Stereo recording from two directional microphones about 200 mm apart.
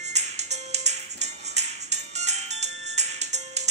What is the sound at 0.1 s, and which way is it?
Music, 35° right (ahead or behind).